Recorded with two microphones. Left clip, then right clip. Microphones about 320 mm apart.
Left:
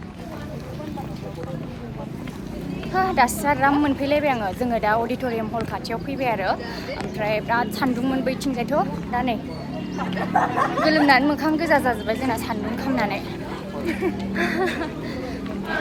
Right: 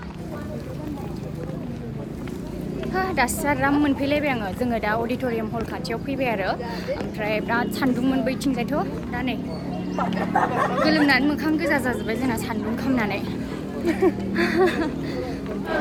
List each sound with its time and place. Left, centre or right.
2.9 s a woman's voice: centre
10.8 s speech: centre
13.8 s speech: right
14.3 s music: centre